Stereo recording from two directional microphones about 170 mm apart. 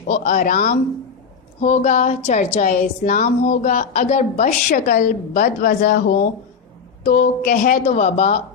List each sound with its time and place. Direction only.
0.1 s a woman's voice: 50° left (ahead or behind)